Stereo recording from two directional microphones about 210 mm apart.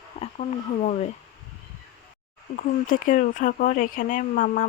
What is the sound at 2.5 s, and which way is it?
Speech, 40° left (ahead or behind).